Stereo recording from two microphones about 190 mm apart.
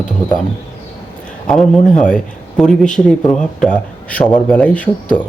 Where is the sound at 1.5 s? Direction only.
5° left (ahead or behind).